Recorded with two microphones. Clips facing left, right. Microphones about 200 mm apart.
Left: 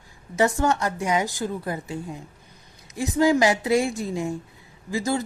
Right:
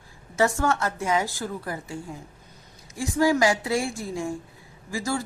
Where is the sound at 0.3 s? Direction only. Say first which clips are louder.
Left 2 dB; 20° left (ahead or behind).